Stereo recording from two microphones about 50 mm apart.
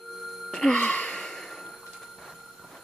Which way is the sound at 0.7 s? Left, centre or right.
Left.